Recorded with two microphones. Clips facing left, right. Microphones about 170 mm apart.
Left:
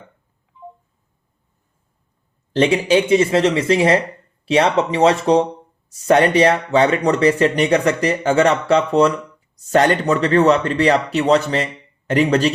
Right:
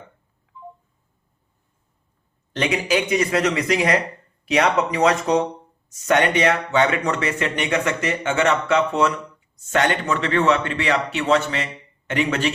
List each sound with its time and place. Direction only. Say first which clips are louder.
2.5 s speech: left 6 dB; 30° left (ahead or behind)